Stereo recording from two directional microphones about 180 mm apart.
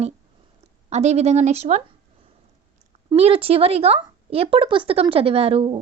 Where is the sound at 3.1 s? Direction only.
30° right (ahead or behind).